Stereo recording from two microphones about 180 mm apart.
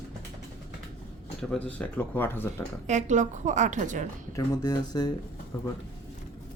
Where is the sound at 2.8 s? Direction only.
40° right (ahead or behind).